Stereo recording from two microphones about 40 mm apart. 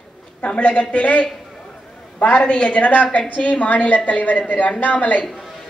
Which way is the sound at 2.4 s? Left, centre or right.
Left.